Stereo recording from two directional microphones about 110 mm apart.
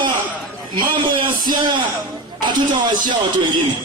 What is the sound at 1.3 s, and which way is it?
Speech, 45° right (ahead or behind).